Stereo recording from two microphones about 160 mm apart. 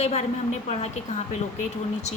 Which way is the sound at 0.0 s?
45° left (ahead or behind).